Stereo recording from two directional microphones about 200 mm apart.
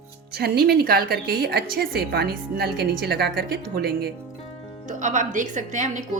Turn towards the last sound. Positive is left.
turn(degrees=-35)  # may be behind; listen again after turning